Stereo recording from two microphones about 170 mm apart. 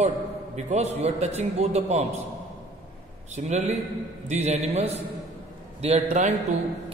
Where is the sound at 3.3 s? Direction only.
40° right (ahead or behind).